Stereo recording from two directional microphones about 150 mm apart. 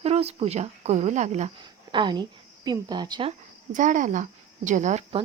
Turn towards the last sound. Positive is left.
turn(degrees=-55)  # may be behind; listen again after turning